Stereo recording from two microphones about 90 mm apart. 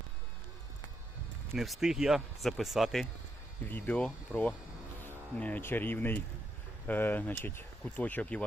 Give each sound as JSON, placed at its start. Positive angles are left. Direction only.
{"t": 1.5, "sound": "speech", "side_deg": -5}
{"t": 3.7, "sound": "speech", "side_deg": 20}
{"t": 5.0, "sound": "insect", "side_deg": 20}
{"t": 5.6, "sound": "speech", "side_deg": 20}